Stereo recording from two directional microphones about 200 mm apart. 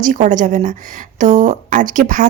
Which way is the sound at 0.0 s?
40° right (ahead or behind).